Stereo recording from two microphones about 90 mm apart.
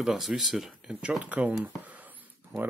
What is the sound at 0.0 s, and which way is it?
Speech, centre (ahead or behind).